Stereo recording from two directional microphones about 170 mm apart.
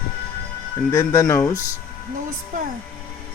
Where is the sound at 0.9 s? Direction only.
20° left (ahead or behind).